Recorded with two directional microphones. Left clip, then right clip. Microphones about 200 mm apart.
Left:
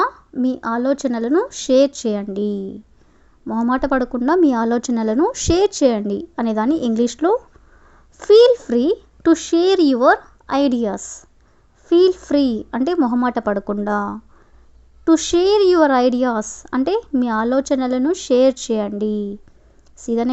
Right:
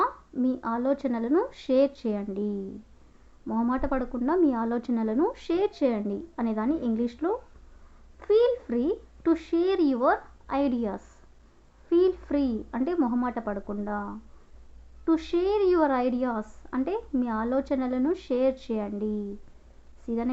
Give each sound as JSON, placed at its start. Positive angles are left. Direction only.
{"t": 0.0, "sound": "a woman's voice", "side_deg": 35}
{"t": 15.0, "sound": "a woman's voice", "side_deg": 35}